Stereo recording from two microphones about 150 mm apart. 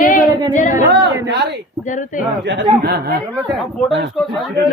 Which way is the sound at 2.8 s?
90° right.